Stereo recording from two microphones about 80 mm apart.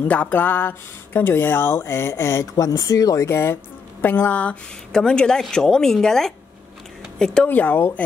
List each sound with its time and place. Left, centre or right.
0.1 s speech: centre; by 2.5 s left
2.5 s speech: left
3.3 s speech: left
4.0 s speech: left
7.4 s speech: left